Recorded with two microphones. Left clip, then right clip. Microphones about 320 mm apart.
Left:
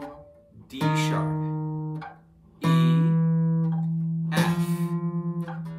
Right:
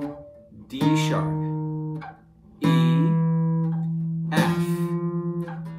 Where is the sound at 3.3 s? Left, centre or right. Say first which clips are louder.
Right 1 dB; centre.